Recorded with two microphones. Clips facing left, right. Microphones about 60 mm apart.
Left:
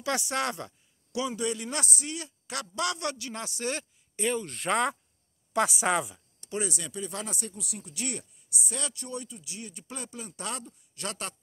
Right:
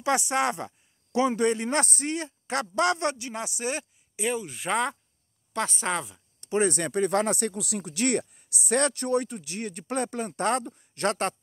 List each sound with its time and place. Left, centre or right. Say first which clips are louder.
0.0 s speech: right 5 dB; right
1.1 s a man's voice: right 7 dB; right; by 3.8 s centre
4.2 s a woman's voice: right 1 dB; centre
6.4 s speech: right 9 dB; right